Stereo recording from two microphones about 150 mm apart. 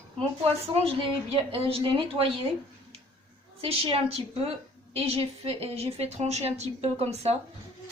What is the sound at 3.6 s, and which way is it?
A woman's voice, 40° right (ahead or behind).